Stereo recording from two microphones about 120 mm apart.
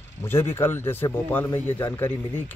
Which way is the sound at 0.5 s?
20° left (ahead or behind).